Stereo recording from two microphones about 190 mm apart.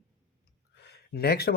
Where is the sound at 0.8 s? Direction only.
60° left (ahead or behind).